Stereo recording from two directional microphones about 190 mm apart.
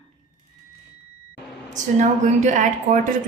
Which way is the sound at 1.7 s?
40° right (ahead or behind).